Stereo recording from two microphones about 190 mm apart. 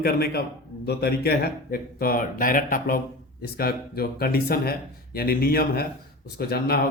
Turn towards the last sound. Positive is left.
turn(degrees=55)  # may be behind; listen again after turning